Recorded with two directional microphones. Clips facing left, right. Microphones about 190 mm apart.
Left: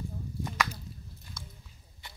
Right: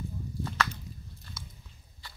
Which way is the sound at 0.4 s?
15° left (ahead or behind).